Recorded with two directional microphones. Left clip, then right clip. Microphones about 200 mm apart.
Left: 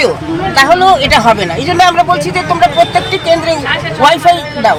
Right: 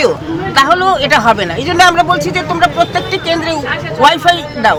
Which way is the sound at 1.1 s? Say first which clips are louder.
Left 2 dB; 25° right (ahead or behind).